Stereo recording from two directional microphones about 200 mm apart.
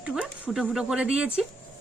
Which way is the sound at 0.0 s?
5° right (ahead or behind).